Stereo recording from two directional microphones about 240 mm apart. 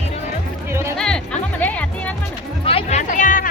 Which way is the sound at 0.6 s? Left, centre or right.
Centre.